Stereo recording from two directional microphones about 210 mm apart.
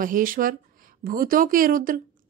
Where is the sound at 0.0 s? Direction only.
40° right (ahead or behind).